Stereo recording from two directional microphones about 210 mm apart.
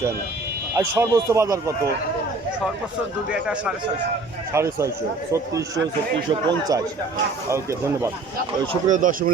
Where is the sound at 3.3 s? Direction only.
5° right (ahead or behind).